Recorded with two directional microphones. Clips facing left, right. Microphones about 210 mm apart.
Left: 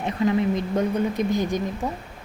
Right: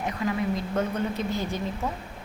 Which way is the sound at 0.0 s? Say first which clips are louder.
Left 6 dB; 20° left (ahead or behind).